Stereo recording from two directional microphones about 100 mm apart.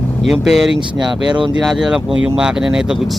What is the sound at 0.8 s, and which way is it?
Speech, 55° right (ahead or behind).